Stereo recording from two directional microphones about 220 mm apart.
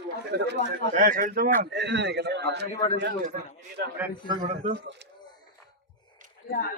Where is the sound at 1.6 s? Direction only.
50° right (ahead or behind).